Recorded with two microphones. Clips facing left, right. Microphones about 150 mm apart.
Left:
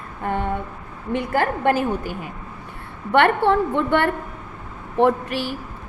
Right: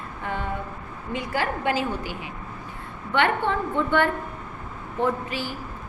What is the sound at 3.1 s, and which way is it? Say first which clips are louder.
A woman's voice: left 6 dB; 65° left (ahead or behind).